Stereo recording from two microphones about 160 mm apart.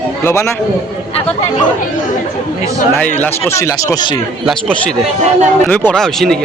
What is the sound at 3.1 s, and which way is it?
Speech, 15° left (ahead or behind).